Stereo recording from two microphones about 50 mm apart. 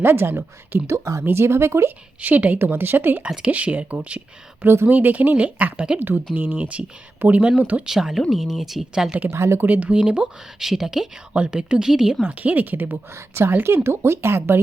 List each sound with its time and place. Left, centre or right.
0.0 s speech: right
0.9 s speech: right
1.2 s speech: right
2.2 s speech: right
2.6 s speech: right
3.2 s speech: centre
3.5 s speech: right
7.9 s speech: centre
9.3 s speech: right
9.6 s speech: right
10.6 s speech: centre
11.3 s speech: right
12.2 s speech: right
13.1 s speech: right